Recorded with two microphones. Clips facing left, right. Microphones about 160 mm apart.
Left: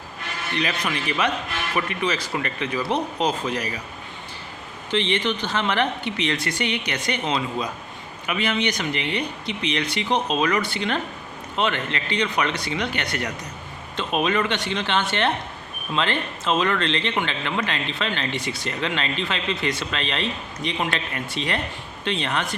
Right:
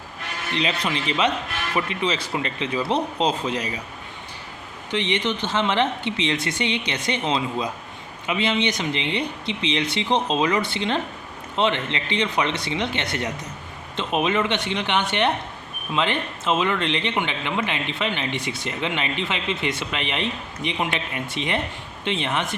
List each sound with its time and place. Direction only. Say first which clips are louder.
0.5 s speech: right 1 dB; 25° right (ahead or behind)
4.9 s speech: left 1 dB; 15° right (ahead or behind)